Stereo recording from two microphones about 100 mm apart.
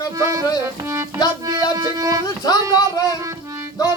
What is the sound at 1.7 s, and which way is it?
Speech, 35° right (ahead or behind).